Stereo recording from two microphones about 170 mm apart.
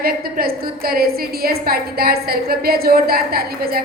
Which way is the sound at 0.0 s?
60° right (ahead or behind).